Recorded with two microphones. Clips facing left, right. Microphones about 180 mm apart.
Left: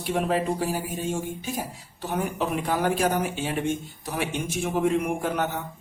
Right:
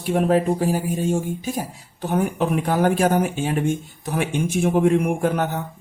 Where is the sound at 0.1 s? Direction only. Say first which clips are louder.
Right 6 dB; 45° right (ahead or behind).